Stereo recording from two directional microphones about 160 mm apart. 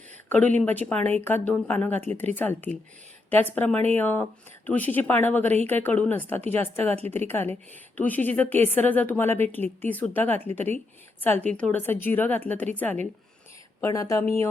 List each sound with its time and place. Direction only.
0.3 s speech: 10° left (ahead or behind)